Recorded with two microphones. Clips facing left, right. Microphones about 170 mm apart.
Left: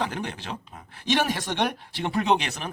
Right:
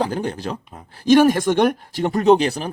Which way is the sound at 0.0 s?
35° right (ahead or behind).